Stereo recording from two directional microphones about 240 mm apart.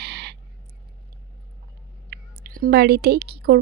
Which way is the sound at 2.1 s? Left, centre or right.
Right.